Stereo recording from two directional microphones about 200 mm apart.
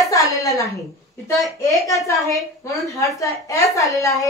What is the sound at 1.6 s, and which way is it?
A woman's voice, 15° left (ahead or behind).